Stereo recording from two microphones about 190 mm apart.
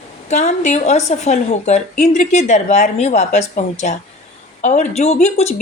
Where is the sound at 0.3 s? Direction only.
40° left (ahead or behind).